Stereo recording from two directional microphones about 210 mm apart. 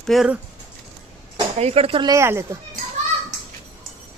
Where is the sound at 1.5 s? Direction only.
30° right (ahead or behind); by 2.6 s 15° right (ahead or behind).